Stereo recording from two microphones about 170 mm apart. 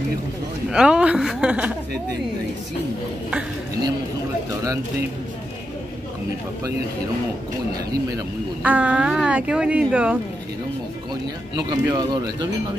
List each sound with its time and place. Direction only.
0.7 s a woman's voice: 5° right (ahead or behind)
8.6 s speech: 10° right (ahead or behind)
11.5 s speech: 25° right (ahead or behind)